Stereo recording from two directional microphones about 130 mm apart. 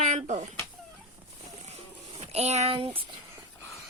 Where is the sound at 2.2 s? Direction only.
55° right (ahead or behind).